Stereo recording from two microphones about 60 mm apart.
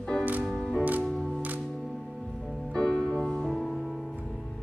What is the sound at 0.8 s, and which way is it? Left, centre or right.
Music, right.